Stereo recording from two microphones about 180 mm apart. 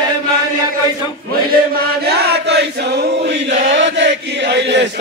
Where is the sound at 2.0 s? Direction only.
65° right (ahead or behind).